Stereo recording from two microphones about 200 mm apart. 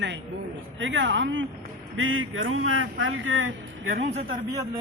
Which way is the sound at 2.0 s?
85° right.